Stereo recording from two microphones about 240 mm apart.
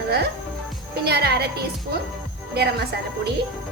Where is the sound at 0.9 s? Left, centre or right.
Right.